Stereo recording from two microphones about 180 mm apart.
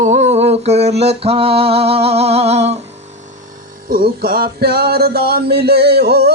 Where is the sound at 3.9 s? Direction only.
55° right (ahead or behind).